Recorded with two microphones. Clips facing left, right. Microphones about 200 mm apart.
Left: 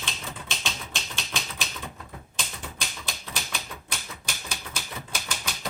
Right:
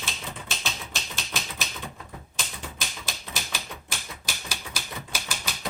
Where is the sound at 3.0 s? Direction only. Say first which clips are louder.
Even; 5° right (ahead or behind).